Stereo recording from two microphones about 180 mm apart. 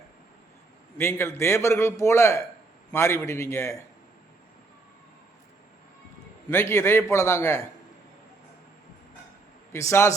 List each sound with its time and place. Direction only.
0.9 s a man's voice: 15° left (ahead or behind)
6.5 s a man's voice: 10° left (ahead or behind)
9.7 s a man's voice: 15° left (ahead or behind)